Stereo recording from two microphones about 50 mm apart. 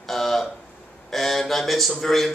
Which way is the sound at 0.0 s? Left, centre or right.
Centre.